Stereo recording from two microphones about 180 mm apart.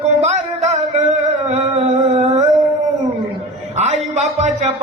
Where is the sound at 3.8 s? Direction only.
40° right (ahead or behind).